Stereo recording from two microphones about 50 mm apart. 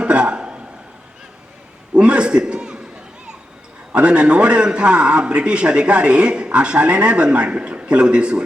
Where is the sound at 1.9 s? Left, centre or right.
Right.